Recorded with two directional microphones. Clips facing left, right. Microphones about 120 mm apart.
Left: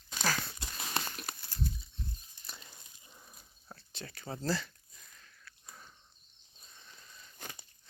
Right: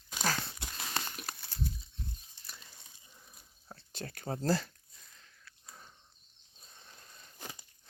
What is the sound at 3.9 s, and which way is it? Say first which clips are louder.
Speech: right 4 dB; 45° right (ahead or behind).